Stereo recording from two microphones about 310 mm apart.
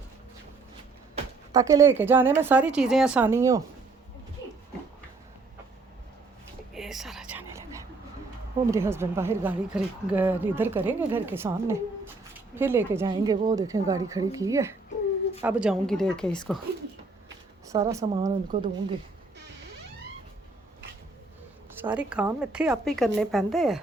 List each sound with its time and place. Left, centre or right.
1.1 s speech: centre
6.7 s whispering: centre
8.7 s speech: centre
17.7 s speech: centre
19.4 s a sound: right
21.8 s speech: centre